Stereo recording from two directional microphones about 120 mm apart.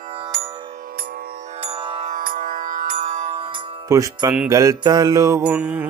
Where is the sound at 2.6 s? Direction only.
90° right.